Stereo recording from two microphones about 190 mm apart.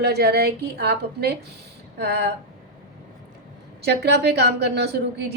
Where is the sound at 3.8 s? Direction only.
60° right (ahead or behind).